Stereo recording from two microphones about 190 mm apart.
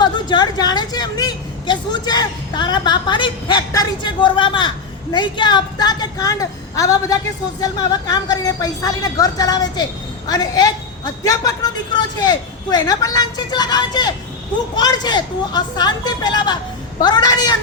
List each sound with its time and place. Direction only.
0.0 s speech: 20° left (ahead or behind)